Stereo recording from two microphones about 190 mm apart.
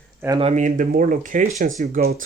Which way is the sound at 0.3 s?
35° right (ahead or behind).